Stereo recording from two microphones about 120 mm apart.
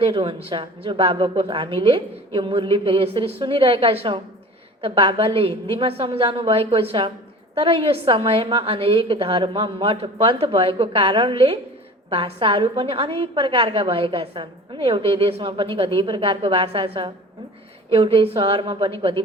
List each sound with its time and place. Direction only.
0.0 s a woman's voice: 45° right (ahead or behind)